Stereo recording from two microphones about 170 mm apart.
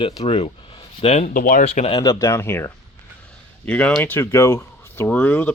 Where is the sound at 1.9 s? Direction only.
20° left (ahead or behind).